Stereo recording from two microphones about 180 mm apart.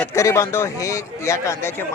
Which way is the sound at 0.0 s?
15° left (ahead or behind).